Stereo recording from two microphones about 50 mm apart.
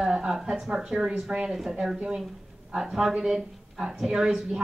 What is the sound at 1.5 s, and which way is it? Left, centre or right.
A woman's voice, centre.